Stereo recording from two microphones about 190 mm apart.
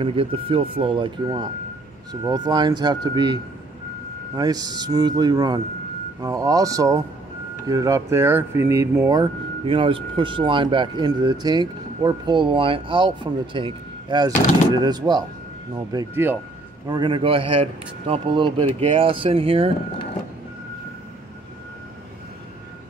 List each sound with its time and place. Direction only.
0.0 s speech: 30° right (ahead or behind)
4.4 s speech: 20° right (ahead or behind)